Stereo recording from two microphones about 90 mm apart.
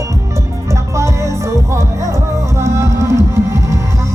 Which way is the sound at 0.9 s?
35° right (ahead or behind).